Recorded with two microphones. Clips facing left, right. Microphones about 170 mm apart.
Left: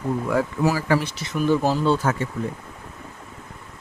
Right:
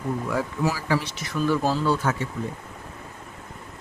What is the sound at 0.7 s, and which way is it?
Speech, 50° left (ahead or behind).